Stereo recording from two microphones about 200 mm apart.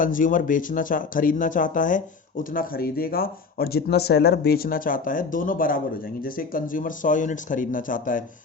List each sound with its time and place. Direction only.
0.0 s speech: 40° left (ahead or behind)